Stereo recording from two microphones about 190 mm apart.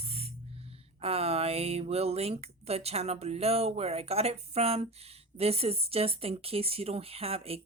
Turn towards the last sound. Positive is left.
turn(degrees=-30)  # may be behind; listen again after turning